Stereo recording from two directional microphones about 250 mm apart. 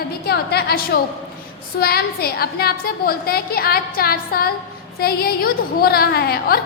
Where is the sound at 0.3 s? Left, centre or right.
Left.